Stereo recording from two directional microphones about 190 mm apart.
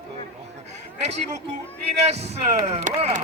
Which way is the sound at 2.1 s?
35° right (ahead or behind).